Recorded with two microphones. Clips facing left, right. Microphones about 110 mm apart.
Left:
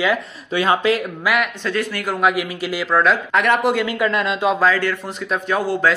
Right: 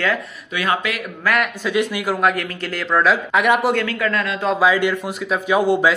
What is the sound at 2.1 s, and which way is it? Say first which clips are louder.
Speech: left 3 dB; 5° left (ahead or behind).